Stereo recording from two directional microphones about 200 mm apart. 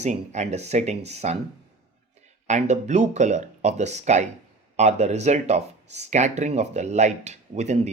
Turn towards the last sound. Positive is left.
turn(degrees=-35)  # may be behind; listen again after turning